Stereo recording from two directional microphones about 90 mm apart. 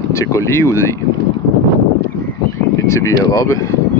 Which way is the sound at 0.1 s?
35° left (ahead or behind).